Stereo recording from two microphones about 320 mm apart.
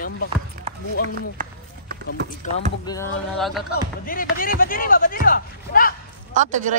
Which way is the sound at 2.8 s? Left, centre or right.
Centre.